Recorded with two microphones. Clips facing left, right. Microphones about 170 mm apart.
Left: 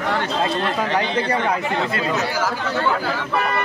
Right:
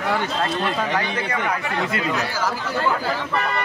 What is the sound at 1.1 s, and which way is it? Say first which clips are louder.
Speech: left 4 dB; 30° left (ahead or behind).